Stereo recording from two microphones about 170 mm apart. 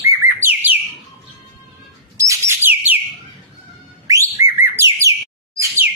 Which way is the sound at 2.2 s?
15° right (ahead or behind).